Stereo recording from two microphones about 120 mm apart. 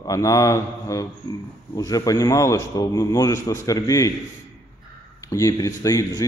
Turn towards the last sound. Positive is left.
turn(degrees=30)  # may be behind; listen again after turning